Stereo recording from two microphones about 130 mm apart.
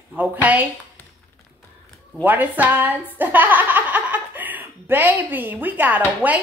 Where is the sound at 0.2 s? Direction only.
10° right (ahead or behind).